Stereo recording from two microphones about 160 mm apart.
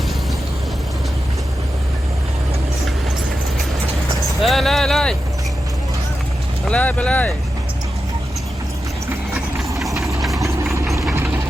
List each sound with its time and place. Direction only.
4.4 s a sound: centre (ahead or behind)
6.7 s speech: 10° left (ahead or behind)
9.9 s engine: 20° right (ahead or behind)